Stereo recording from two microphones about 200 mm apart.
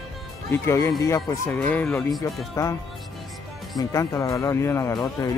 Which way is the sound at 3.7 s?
15° left (ahead or behind).